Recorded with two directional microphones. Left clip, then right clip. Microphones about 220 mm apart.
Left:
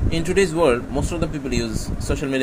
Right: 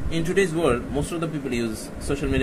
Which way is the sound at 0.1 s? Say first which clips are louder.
Left 2 dB; 15° left (ahead or behind).